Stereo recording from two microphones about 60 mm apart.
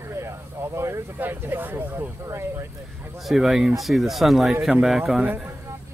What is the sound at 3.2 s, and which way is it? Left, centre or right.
Speech, centre.